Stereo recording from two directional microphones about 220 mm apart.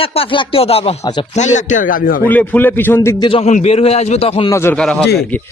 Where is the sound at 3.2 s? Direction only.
25° left (ahead or behind).